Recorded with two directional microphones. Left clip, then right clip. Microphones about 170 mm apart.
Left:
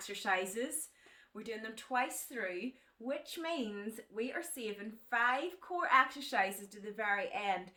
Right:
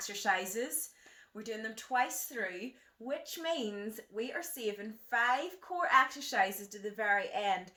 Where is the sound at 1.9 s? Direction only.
15° left (ahead or behind).